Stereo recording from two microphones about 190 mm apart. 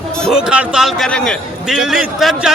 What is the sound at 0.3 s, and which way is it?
A man's voice, 5° right (ahead or behind).